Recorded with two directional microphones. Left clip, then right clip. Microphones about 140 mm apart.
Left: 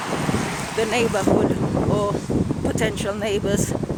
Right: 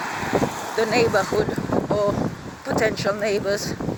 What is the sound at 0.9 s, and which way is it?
Speech, 20° left (ahead or behind).